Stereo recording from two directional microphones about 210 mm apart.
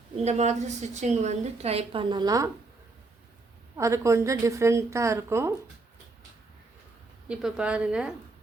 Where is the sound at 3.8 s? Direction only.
15° right (ahead or behind).